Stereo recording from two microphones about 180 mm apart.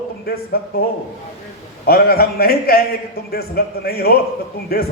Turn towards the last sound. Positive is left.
turn(degrees=60)  # may be behind; listen again after turning